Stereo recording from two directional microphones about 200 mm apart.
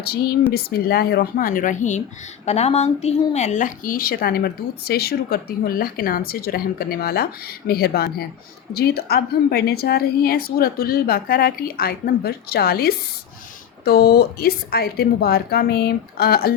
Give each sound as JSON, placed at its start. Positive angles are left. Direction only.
{"t": 0.0, "sound": "a woman's voice", "side_deg": 50}